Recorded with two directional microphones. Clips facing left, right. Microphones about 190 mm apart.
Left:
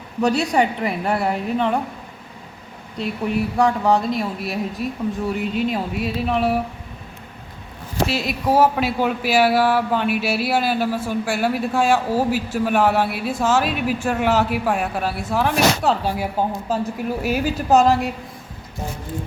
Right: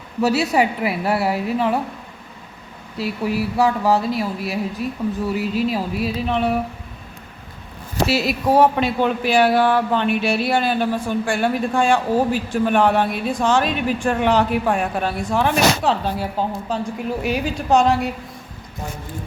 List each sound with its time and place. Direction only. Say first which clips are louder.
0.2 s speech: right 1 dB; 5° right (ahead or behind)
3.0 s speech: even; 5° right (ahead or behind)
8.0 s speech: right 2 dB; 5° right (ahead or behind)